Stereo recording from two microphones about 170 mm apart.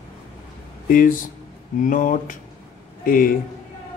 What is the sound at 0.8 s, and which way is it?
Speech, 55° left (ahead or behind).